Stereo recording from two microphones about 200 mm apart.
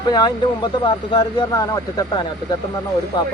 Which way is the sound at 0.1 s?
20° left (ahead or behind).